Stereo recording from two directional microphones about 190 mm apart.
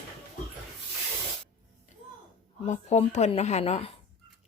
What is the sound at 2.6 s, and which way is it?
Speech, 35° left (ahead or behind).